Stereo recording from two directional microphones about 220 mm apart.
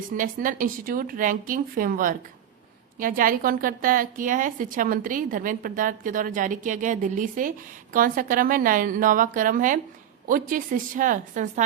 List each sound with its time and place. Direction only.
0.2 s a woman's voice: 40° right (ahead or behind)